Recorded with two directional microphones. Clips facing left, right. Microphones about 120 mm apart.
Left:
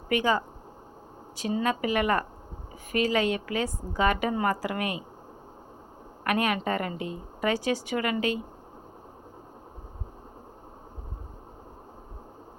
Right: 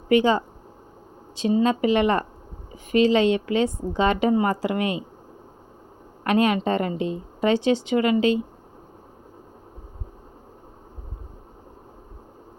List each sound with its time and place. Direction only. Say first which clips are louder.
0.1 s a woman's voice: right 7 dB; 25° right (ahead or behind)
6.2 s a woman's voice: right 6 dB; 25° right (ahead or behind)